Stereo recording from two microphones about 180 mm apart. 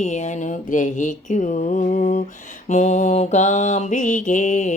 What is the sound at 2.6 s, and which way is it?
Mantra, 40° left (ahead or behind).